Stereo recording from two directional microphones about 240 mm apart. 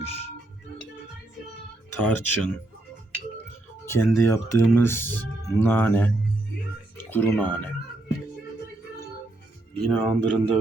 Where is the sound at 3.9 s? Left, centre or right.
Centre.